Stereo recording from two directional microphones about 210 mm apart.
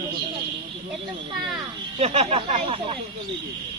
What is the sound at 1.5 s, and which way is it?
Speech, 30° right (ahead or behind).